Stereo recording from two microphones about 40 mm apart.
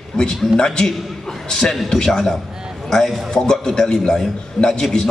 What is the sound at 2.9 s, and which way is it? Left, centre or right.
A man's voice, centre.